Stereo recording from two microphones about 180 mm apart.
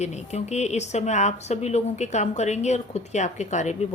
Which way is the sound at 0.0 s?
40° left (ahead or behind).